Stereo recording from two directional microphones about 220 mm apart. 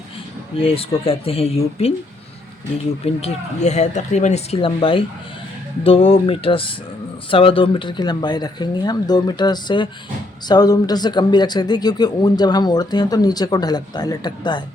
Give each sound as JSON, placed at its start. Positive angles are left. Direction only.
{"t": 0.5, "sound": "speech", "side_deg": 25}
{"t": 3.2, "sound": "speech", "side_deg": 30}